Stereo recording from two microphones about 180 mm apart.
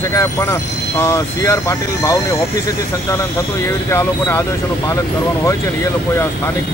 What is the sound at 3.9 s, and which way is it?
Speech, 15° left (ahead or behind).